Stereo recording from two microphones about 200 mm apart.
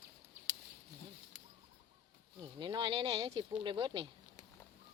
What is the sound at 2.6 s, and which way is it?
Speech, 20° right (ahead or behind).